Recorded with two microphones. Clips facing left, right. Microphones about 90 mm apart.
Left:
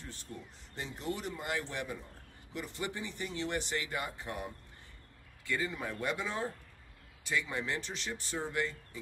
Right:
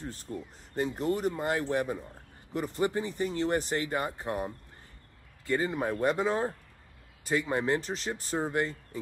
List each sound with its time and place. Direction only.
0.0 s speech: 40° right (ahead or behind)
5.5 s speech: 40° right (ahead or behind)